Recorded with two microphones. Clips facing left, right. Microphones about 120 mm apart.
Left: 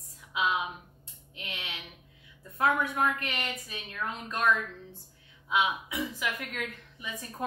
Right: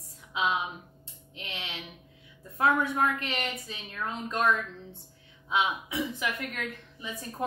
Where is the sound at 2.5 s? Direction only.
25° right (ahead or behind).